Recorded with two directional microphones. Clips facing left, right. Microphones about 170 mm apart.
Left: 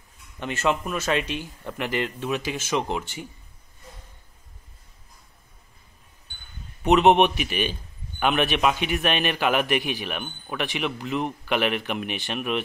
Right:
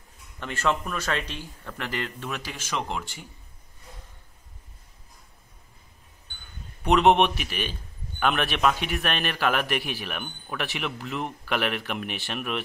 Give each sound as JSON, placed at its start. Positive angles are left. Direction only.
{"t": 0.4, "sound": "speech", "side_deg": 20}
{"t": 6.9, "sound": "speech", "side_deg": 5}